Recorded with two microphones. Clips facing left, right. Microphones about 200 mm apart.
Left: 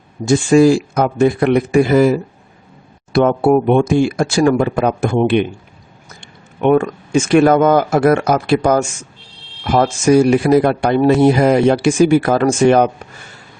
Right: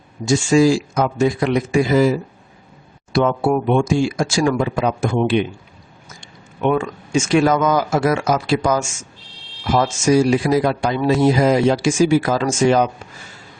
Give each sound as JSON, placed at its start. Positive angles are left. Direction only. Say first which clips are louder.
{"t": 0.3, "sound": "speech", "louder": "left 4 dB", "side_deg": 55}